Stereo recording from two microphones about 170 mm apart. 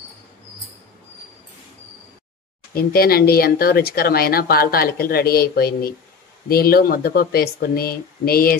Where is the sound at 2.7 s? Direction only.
60° left (ahead or behind).